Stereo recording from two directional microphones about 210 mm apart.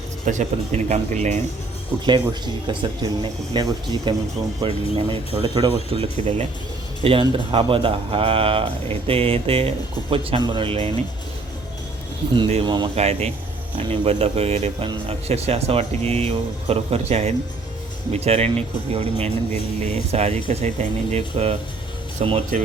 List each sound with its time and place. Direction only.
0.3 s speech: 35° right (ahead or behind)
2.6 s speech: 25° right (ahead or behind)
12.3 s speech: 25° right (ahead or behind)